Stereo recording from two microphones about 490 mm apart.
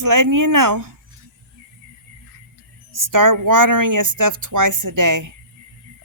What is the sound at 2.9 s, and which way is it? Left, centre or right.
Speech, right.